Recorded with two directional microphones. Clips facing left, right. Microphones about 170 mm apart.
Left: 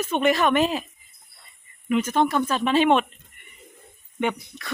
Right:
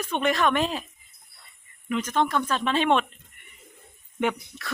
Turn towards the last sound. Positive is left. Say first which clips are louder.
# even
turn(degrees=0)  # may be behind; listen again after turning